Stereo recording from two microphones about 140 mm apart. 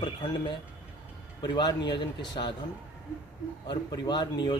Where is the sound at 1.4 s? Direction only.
35° left (ahead or behind).